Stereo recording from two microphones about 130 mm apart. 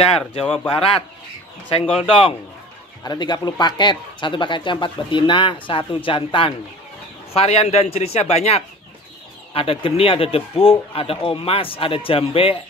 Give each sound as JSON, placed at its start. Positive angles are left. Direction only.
{"t": 0.0, "sound": "speech", "side_deg": 50}
{"t": 3.0, "sound": "speech", "side_deg": 35}